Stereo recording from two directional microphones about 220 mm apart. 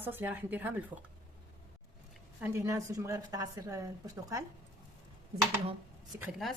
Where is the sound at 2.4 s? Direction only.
15° right (ahead or behind).